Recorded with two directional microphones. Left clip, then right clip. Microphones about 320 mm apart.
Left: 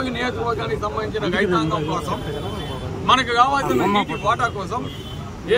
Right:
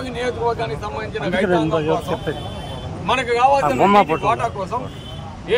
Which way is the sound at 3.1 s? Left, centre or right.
Centre.